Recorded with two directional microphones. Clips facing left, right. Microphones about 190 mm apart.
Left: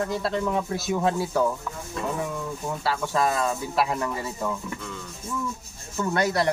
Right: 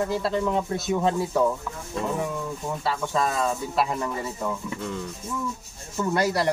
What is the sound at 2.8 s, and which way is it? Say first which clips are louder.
Speech: left 1 dB; 5° left (ahead or behind).